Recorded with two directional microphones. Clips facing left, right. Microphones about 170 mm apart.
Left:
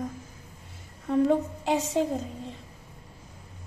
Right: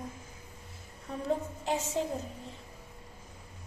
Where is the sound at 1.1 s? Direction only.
90° left.